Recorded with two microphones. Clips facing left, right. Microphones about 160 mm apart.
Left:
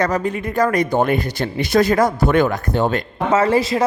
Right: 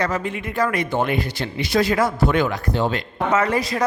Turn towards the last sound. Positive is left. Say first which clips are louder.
# left 4 dB
turn(degrees=25)  # may be behind; listen again after turning